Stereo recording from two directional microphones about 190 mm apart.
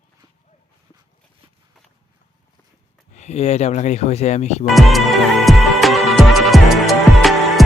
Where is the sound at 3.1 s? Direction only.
35° left (ahead or behind).